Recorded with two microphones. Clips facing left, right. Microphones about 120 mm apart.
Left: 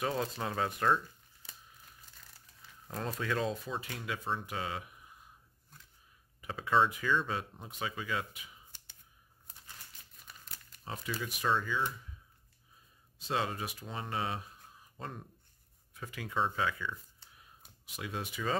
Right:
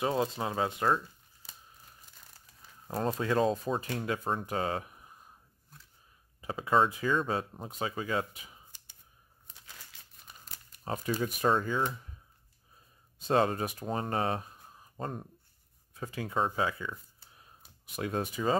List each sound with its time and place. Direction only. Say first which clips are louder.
0.0 s speech: right 4 dB; 25° right (ahead or behind)
2.9 s speech: right 6 dB; 35° right (ahead or behind)
6.4 s speech: right 2 dB; 30° right (ahead or behind)
10.8 s speech: right 7 dB; 45° right (ahead or behind)
13.2 s speech: right 7 dB; 45° right (ahead or behind)
17.9 s speech: right 7 dB; 45° right (ahead or behind)